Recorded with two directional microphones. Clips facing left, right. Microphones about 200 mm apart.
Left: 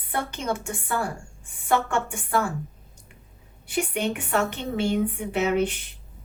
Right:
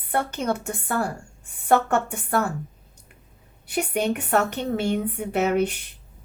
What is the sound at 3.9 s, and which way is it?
A woman's voice, 40° right (ahead or behind).